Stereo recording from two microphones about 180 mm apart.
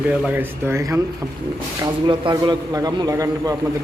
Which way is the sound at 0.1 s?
10° right (ahead or behind).